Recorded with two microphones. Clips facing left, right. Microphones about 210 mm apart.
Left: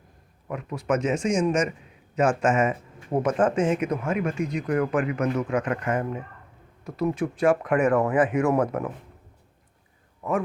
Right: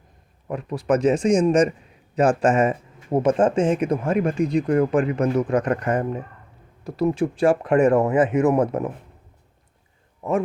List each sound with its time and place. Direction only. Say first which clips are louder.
0.4 s speech: right 4 dB; 35° right (ahead or behind)